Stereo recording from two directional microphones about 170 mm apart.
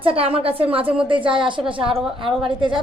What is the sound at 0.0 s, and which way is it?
A woman's voice, 35° right (ahead or behind).